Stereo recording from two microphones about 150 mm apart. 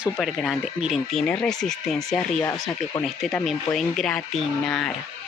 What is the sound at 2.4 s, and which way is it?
Speech, 20° left (ahead or behind).